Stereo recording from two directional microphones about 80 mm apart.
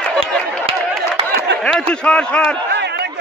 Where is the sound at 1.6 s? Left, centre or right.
Centre.